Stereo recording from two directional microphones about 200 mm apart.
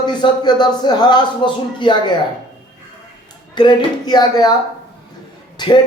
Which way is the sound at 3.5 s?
20° left (ahead or behind).